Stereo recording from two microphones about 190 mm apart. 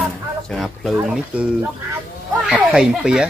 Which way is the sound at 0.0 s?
Centre (ahead or behind).